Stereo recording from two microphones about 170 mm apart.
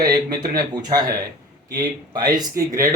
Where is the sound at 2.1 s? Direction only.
25° right (ahead or behind).